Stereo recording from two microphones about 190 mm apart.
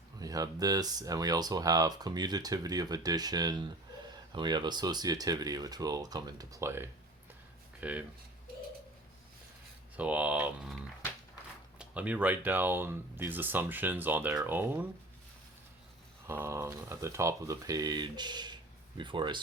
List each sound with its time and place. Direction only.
0.2 s speech: 20° right (ahead or behind)
10.0 s speech: 5° right (ahead or behind)
11.8 s speech: 5° right (ahead or behind)
16.2 s speech: 15° right (ahead or behind)